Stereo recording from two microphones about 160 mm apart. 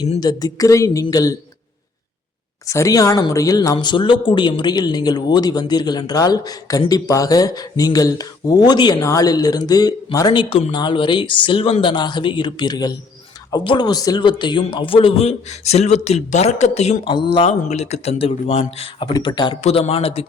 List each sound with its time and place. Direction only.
0.2 s speech: 25° left (ahead or behind)
2.6 s speech: 20° left (ahead or behind); by 17.1 s 40° left (ahead or behind)
17.1 s speech: 30° left (ahead or behind)
17.7 s speech: 45° left (ahead or behind)
19.1 s speech: 25° left (ahead or behind)
19.6 s speech: 40° left (ahead or behind)